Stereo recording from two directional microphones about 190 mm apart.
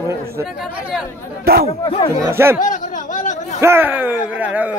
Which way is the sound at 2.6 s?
40° left (ahead or behind).